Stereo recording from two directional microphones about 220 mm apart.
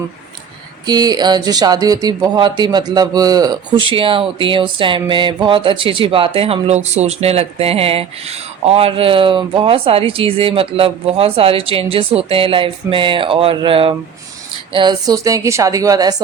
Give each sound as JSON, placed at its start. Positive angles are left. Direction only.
{"t": 0.9, "sound": "a woman's voice", "side_deg": -20}